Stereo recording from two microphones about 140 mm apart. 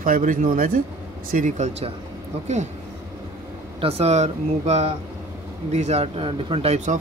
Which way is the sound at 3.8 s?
45° right (ahead or behind).